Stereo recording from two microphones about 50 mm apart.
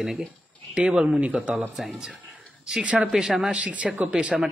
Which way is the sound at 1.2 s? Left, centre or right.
Right.